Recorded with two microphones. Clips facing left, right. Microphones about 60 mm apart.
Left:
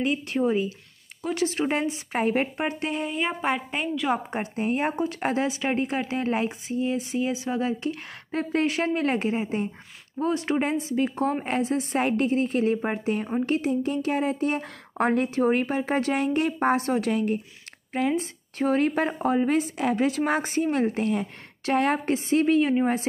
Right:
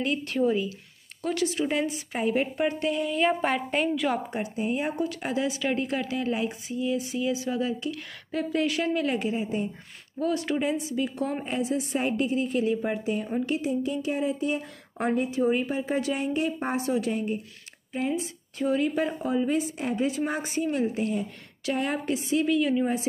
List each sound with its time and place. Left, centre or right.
0.0 s speech: left
1.4 s a woman's voice: left
2.5 s speech: left
3.2 s a woman's voice: centre
4.4 s a woman's voice: left
5.5 s speech: left
10.6 s a woman's voice: left
17.1 s speech: left
18.1 s a woman's voice: left
19.8 s a woman's voice: left